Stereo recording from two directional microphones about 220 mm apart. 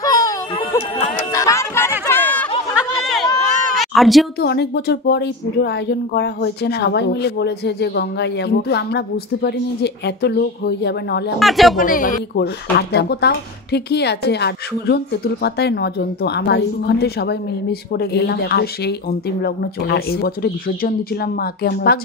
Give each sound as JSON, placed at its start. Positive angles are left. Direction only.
{"t": 0.0, "sound": "music", "side_deg": 15}
{"t": 0.9, "sound": "music", "side_deg": 35}
{"t": 1.3, "sound": "music", "side_deg": 15}
{"t": 2.7, "sound": "chatter", "side_deg": 0}
{"t": 3.7, "sound": "a sound", "side_deg": 0}
{"t": 4.4, "sound": "speech", "side_deg": 45}
{"t": 11.3, "sound": "speech", "side_deg": 0}
{"t": 11.8, "sound": "speech", "side_deg": 40}
{"t": 12.9, "sound": "speech", "side_deg": 50}